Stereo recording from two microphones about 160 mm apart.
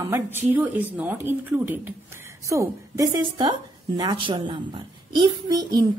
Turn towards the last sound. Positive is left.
turn(degrees=-25)  # may be behind; listen again after turning